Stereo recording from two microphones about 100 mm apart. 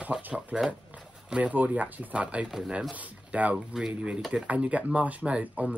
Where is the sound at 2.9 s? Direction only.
15° right (ahead or behind).